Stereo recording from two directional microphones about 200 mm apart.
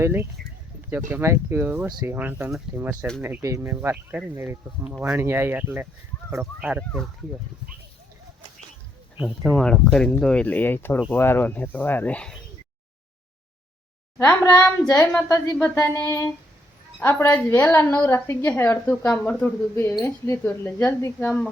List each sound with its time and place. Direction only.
0.0 s speech: 10° right (ahead or behind)
1.9 s speech: 20° right (ahead or behind)
2.1 s speech: 5° right (ahead or behind)
9.1 s a woman's voice: centre (ahead or behind)
14.2 s a woman's voice: 10° left (ahead or behind)